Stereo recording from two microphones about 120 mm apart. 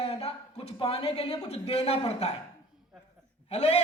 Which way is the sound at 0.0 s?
60° left (ahead or behind).